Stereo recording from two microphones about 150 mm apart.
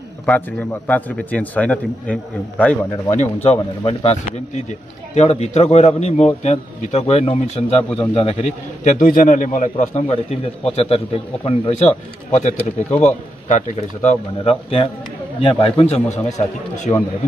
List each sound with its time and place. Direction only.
0.2 s a man's voice: 10° left (ahead or behind)
3.5 s a man's voice: 40° left (ahead or behind)